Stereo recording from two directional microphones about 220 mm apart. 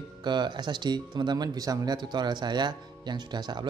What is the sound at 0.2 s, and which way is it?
Speech, 20° right (ahead or behind).